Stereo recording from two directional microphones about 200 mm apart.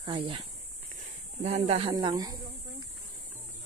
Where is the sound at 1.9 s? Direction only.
20° right (ahead or behind).